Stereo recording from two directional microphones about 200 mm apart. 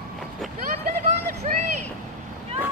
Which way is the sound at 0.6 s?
45° right (ahead or behind).